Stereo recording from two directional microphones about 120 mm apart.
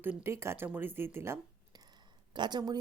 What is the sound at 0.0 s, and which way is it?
A woman's voice, 20° right (ahead or behind).